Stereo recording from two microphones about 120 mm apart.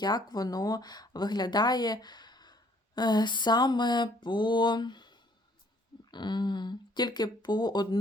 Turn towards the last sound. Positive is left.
turn(degrees=35)  # may be behind; listen again after turning